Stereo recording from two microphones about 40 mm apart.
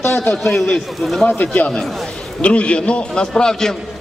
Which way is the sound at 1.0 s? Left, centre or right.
Centre.